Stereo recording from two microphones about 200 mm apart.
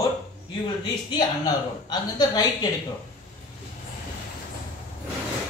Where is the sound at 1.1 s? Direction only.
20° left (ahead or behind).